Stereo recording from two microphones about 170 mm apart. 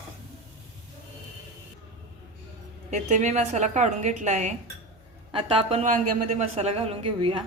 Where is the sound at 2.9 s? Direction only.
45° right (ahead or behind).